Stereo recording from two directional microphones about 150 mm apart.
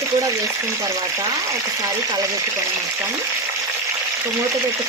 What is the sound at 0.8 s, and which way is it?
Frying, 20° right (ahead or behind).